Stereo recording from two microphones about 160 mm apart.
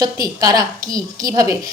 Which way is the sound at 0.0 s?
25° right (ahead or behind).